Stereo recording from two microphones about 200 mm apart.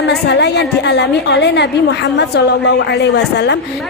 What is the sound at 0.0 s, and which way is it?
A woman's voice, 60° left (ahead or behind).